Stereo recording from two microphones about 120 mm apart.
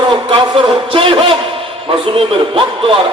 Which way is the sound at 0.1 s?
45° right (ahead or behind).